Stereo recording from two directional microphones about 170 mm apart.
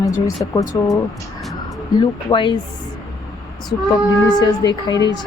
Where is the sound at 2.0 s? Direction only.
25° left (ahead or behind).